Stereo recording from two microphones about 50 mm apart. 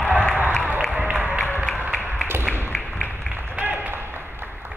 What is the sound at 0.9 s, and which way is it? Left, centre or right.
Music, right.